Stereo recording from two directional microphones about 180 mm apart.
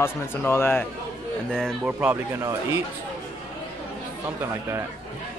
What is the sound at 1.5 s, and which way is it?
Speech, centre (ahead or behind).